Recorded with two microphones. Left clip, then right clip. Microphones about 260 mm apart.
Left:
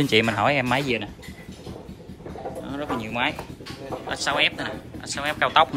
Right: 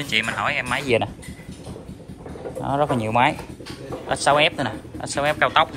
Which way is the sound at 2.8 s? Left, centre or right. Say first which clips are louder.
Right 4 dB; centre.